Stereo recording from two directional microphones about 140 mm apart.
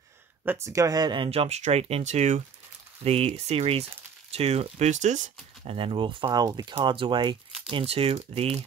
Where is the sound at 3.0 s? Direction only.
45° right (ahead or behind).